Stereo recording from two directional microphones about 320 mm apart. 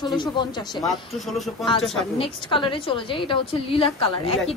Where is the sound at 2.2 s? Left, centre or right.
Centre.